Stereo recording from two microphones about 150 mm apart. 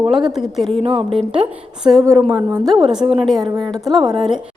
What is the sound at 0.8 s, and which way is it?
Speech, 40° right (ahead or behind).